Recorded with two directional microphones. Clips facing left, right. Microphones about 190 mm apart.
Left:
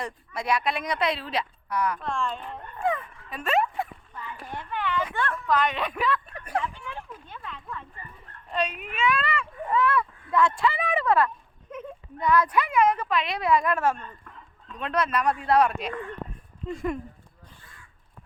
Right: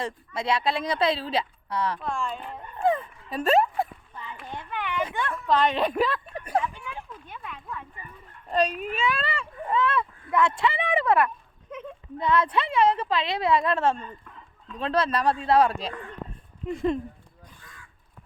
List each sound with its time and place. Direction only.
0.0 s speech: 25° right (ahead or behind)
2.0 s a woman's voice: 5° right (ahead or behind)
2.8 s a sound: 35° right (ahead or behind)
4.5 s a sound: 15° right (ahead or behind)
5.5 s speech: 30° right (ahead or behind)
6.7 s a sound: 15° right (ahead or behind)
8.4 s speech: 40° right (ahead or behind)
14.0 s chicken: 5° right (ahead or behind)
14.8 s speech: 30° right (ahead or behind)